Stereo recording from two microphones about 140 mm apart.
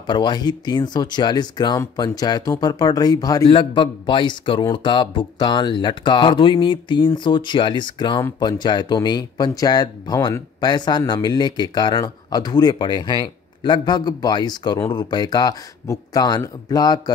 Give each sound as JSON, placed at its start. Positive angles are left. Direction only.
{"t": 0.0, "sound": "speech", "side_deg": 35}